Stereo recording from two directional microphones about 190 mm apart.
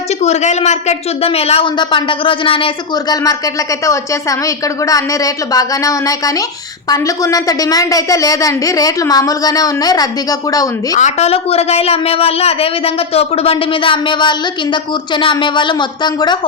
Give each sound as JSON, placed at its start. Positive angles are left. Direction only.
{"t": 0.1, "sound": "a woman's voice", "side_deg": 35}
{"t": 10.9, "sound": "a woman's voice", "side_deg": 35}